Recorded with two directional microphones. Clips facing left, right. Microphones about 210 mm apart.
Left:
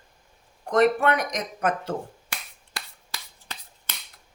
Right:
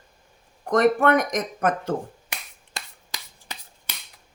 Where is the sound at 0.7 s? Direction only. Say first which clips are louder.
Right 2 dB; 50° right (ahead or behind).